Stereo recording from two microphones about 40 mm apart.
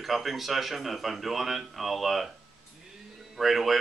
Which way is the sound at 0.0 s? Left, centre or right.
Centre.